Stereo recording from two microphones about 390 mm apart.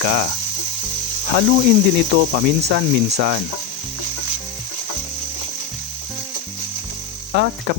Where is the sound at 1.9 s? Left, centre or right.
Right.